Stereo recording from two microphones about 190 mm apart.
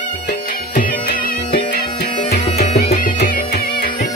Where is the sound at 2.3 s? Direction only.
35° left (ahead or behind).